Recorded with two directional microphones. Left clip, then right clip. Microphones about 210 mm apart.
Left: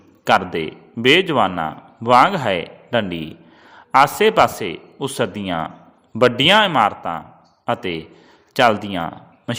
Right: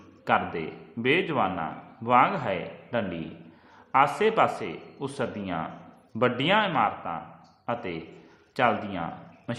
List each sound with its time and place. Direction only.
0.3 s a man's voice: 40° left (ahead or behind)